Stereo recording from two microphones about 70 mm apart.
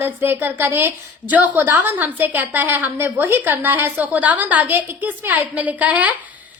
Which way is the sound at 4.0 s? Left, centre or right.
Right.